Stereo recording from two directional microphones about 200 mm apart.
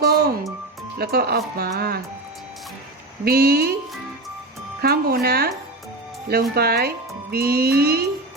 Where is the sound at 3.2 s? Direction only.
50° right (ahead or behind).